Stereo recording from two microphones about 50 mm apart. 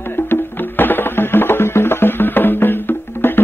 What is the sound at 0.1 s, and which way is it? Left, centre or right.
Music, left.